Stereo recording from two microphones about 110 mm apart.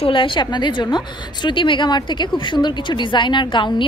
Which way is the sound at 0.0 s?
50° left (ahead or behind).